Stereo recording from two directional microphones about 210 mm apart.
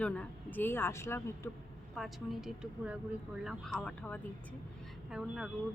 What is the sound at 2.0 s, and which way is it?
A woman's voice, centre (ahead or behind).